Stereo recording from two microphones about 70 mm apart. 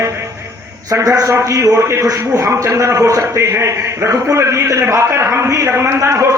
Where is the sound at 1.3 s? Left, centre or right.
Right.